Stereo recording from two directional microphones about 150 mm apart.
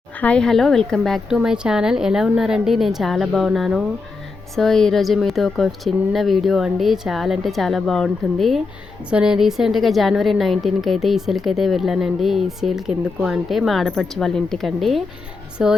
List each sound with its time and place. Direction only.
0.2 s speech: 5° left (ahead or behind)